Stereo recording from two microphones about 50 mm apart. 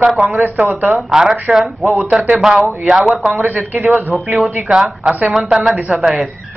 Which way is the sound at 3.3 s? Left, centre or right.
Right.